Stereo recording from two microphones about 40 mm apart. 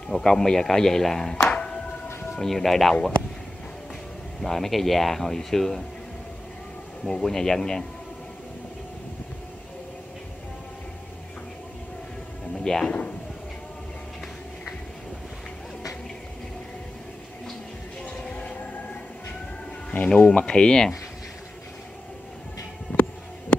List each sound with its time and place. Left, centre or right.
0.1 s speech: centre
1.5 s a sound: left
2.3 s speech: centre
4.4 s speech: centre
7.1 s speech: centre
12.6 s speech: centre
18.0 s train: left
20.2 s speech: left
22.9 s music: left